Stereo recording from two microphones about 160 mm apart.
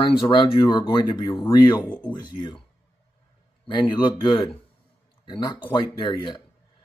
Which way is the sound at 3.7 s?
30° left (ahead or behind).